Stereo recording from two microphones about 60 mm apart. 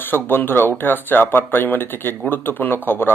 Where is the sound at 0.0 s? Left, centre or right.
Left.